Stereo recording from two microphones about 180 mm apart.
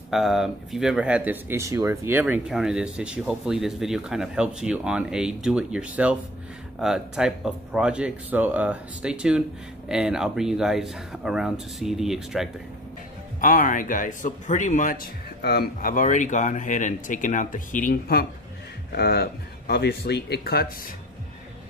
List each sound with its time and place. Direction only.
0.1 s speech: centre (ahead or behind)
13.4 s speech: 50° left (ahead or behind)
15.4 s speech: 60° left (ahead or behind)